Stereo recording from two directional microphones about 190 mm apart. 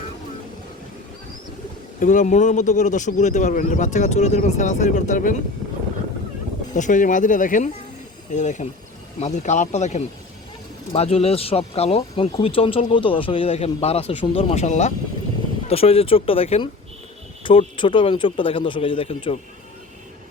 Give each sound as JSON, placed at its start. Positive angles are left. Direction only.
{"t": 2.0, "sound": "speech", "side_deg": 40}
{"t": 6.7, "sound": "speech", "side_deg": 40}